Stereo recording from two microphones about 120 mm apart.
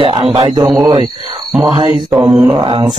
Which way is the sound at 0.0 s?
40° right (ahead or behind).